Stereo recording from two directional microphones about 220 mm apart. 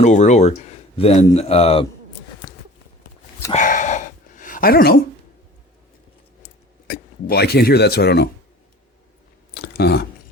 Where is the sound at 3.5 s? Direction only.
35° left (ahead or behind).